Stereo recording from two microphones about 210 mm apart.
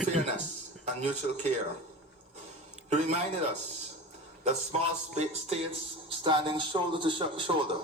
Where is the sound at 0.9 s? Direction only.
30° right (ahead or behind).